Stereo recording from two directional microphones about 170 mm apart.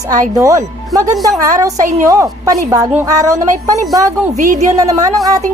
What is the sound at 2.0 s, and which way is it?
A woman's voice, 20° right (ahead or behind).